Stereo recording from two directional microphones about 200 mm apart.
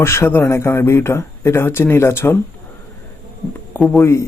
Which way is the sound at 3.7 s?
10° left (ahead or behind).